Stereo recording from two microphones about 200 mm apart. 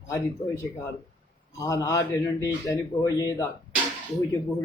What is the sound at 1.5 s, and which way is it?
A man's voice, 15° left (ahead or behind).